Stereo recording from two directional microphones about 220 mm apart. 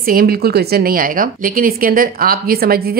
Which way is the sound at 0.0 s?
40° right (ahead or behind).